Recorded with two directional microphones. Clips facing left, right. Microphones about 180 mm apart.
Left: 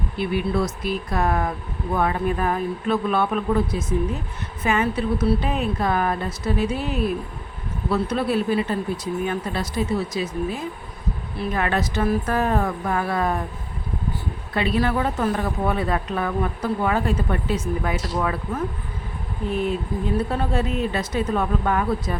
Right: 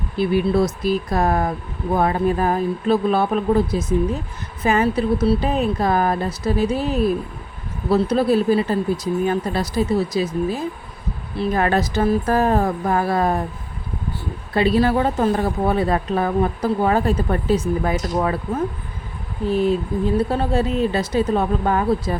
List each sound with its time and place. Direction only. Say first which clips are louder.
0.2 s speech: right 5 dB; 35° right (ahead or behind)
14.5 s speech: right 5 dB; 35° right (ahead or behind)